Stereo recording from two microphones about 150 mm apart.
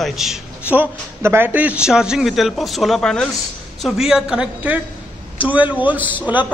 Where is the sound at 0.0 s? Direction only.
Centre (ahead or behind).